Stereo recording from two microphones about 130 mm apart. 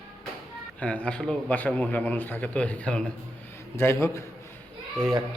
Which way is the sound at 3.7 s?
20° left (ahead or behind).